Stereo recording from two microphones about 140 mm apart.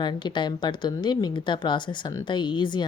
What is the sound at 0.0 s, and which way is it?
A woman's voice, 30° left (ahead or behind).